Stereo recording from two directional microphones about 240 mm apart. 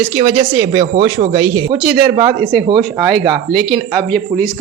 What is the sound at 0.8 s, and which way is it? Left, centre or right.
Speech, right.